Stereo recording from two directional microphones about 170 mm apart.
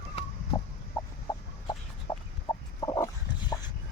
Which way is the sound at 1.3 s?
25° left (ahead or behind).